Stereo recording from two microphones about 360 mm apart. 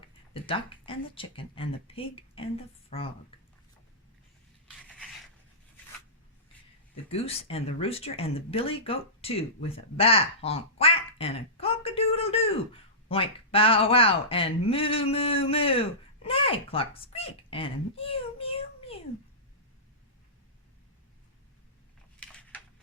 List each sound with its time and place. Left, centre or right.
0.4 s speech: centre
6.9 s speech: centre
22.2 s a sound: centre